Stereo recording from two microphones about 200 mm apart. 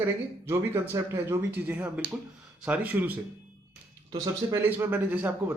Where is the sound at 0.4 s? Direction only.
15° right (ahead or behind).